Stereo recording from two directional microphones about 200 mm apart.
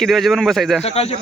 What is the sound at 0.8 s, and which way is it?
Speech, 30° left (ahead or behind).